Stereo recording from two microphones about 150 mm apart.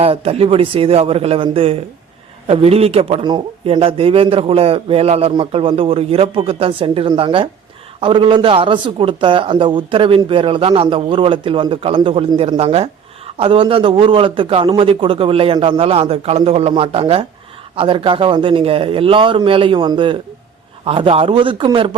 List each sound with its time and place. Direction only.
0.0 s speech: 40° right (ahead or behind)